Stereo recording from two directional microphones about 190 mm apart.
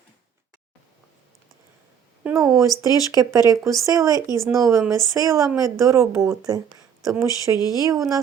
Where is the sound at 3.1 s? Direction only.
15° right (ahead or behind).